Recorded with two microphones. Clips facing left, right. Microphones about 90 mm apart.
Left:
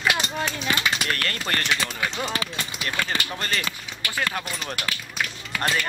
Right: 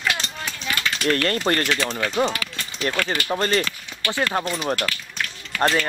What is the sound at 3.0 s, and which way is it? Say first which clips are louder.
Speech: right 6 dB; 30° right (ahead or behind).